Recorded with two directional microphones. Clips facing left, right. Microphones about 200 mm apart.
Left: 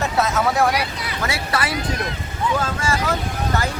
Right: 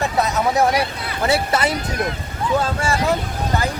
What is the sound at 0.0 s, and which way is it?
Speech, 15° right (ahead or behind).